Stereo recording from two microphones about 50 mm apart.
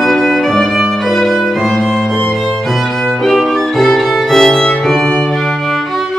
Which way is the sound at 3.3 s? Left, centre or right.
Centre.